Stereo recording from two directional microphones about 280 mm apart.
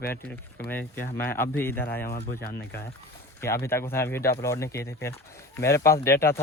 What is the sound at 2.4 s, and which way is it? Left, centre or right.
Speech, left.